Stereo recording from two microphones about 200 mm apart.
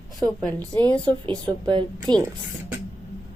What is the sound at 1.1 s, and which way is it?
A woman's voice, 25° right (ahead or behind).